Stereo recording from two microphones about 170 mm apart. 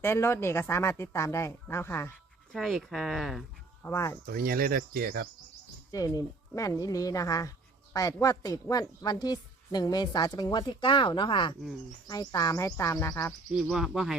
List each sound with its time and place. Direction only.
0.0 s speech: 15° left (ahead or behind)
2.5 s speech: centre (ahead or behind)
3.8 s speech: 15° left (ahead or behind)
4.3 s speech: 55° right (ahead or behind)
5.9 s a woman's voice: 20° left (ahead or behind)
13.5 s speech: centre (ahead or behind)